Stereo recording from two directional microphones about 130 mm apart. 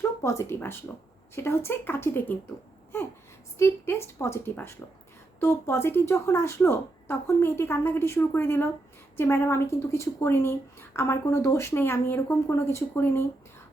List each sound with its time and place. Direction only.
0.2 s speech: 20° left (ahead or behind)
3.6 s speech: 20° left (ahead or behind)